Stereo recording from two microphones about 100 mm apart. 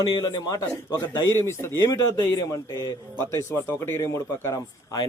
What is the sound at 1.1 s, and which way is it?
A man's voice, 25° left (ahead or behind).